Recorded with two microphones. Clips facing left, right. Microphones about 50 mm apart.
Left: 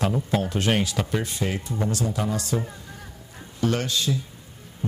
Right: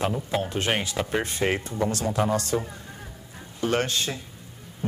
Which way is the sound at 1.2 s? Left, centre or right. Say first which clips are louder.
Right 3 dB; right.